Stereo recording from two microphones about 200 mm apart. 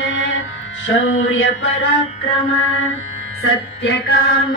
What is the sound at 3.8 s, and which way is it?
Mantra, 60° left (ahead or behind).